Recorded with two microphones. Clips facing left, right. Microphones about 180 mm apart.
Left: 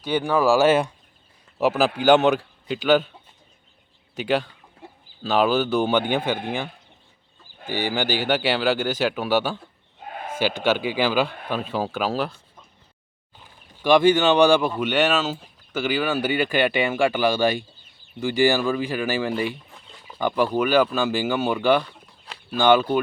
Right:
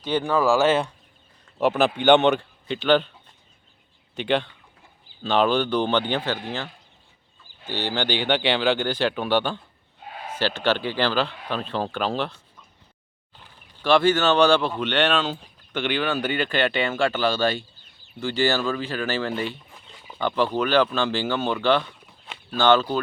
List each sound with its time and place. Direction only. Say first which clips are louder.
0.0 s a man's voice: left 1 dB; 10° left (ahead or behind)
4.1 s a man's voice: left 1 dB; 5° left (ahead or behind)
4.8 s chicken: left 16 dB; 70° left (ahead or behind)
5.2 s speech: left 1 dB; 5° left (ahead or behind)
7.7 s speech: left 2 dB; 10° left (ahead or behind)
10.2 s livestock: left 4 dB; 50° left (ahead or behind)
10.4 s speech: left 1 dB; 10° left (ahead or behind)
13.4 s speech: left 3 dB; 15° left (ahead or behind)
22.3 s a sound: left 1 dB; 10° left (ahead or behind)